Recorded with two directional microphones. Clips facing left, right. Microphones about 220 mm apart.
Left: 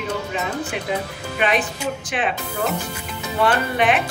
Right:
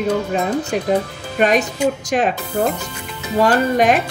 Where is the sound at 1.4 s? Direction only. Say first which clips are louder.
Right 6 dB; 40° right (ahead or behind).